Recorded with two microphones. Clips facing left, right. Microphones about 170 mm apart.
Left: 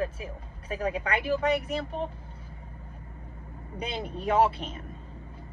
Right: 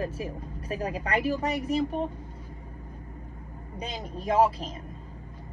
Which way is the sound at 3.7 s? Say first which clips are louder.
Left 2 dB; 35° right (ahead or behind).